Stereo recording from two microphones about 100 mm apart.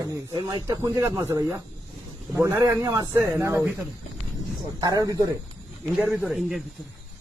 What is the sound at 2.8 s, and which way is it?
Speech, 35° right (ahead or behind).